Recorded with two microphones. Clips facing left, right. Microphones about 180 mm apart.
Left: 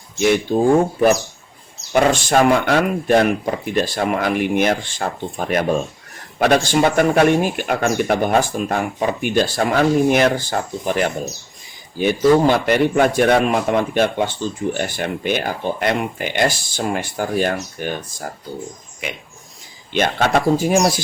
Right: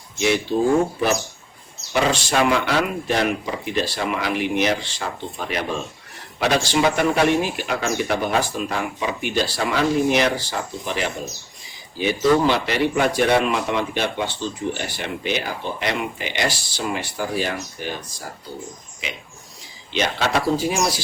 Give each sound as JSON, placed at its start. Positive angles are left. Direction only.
{"t": 0.5, "sound": "speech", "side_deg": 50}
{"t": 1.9, "sound": "speech", "side_deg": 50}